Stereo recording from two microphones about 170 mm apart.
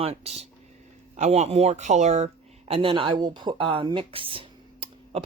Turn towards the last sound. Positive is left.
turn(degrees=-30)  # may be behind; listen again after turning